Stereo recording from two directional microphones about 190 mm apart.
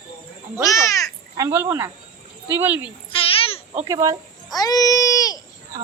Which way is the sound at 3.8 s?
20° right (ahead or behind).